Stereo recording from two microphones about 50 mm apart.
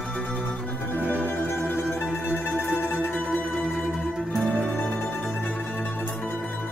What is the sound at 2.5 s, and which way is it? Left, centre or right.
Mandolin, centre.